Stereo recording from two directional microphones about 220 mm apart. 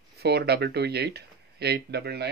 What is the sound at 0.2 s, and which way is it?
Speech, 50° right (ahead or behind).